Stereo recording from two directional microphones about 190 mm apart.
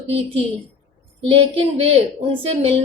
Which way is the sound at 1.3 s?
30° right (ahead or behind).